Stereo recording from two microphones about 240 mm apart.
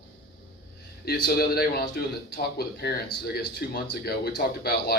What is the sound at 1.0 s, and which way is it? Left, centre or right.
Speech, left.